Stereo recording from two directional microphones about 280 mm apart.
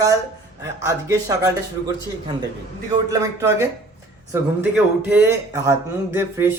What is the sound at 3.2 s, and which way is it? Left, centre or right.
Speech, centre.